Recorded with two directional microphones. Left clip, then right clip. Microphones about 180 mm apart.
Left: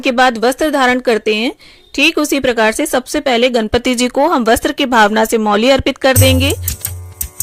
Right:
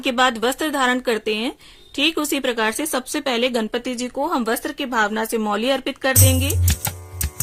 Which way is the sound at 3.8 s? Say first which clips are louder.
Left 11 dB; 45° left (ahead or behind).